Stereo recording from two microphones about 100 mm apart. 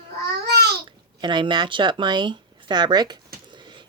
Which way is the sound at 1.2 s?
50° right (ahead or behind).